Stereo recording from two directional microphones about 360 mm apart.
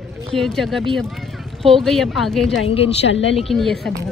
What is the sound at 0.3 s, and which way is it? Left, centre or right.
Speech, centre.